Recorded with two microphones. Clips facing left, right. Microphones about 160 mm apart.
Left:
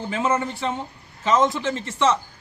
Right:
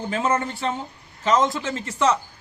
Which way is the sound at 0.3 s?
10° left (ahead or behind).